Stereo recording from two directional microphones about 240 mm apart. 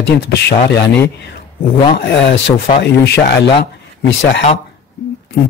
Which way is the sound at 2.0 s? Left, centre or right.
Left.